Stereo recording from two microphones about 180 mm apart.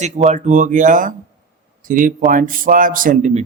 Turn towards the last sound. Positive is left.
turn(degrees=-40)  # may be behind; listen again after turning